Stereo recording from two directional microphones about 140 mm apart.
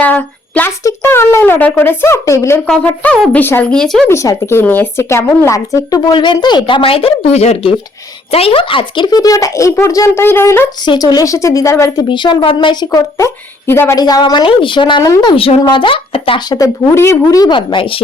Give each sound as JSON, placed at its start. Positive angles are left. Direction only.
{"t": 0.0, "sound": "a sound", "side_deg": 10}
{"t": 0.9, "sound": "speech", "side_deg": 20}
{"t": 2.6, "sound": "speech", "side_deg": 10}
{"t": 4.1, "sound": "speech", "side_deg": 20}
{"t": 10.8, "sound": "speech", "side_deg": 30}
{"t": 12.0, "sound": "speech", "side_deg": 35}
{"t": 14.0, "sound": "speech", "side_deg": 30}
{"t": 16.5, "sound": "speech", "side_deg": 20}
{"t": 17.5, "sound": "speech", "side_deg": 35}